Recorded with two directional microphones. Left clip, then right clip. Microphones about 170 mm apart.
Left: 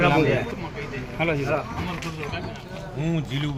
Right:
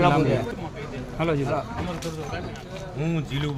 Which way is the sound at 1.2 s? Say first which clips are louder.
Left 1 dB; 90° right.